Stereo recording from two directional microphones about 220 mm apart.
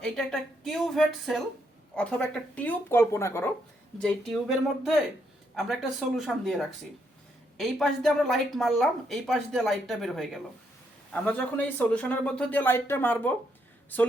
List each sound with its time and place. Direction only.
0.0 s speech: centre (ahead or behind)